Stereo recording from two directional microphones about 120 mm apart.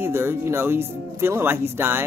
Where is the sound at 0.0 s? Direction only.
20° right (ahead or behind).